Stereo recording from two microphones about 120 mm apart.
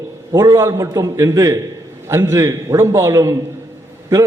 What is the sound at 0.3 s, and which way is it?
A man's voice, 25° right (ahead or behind).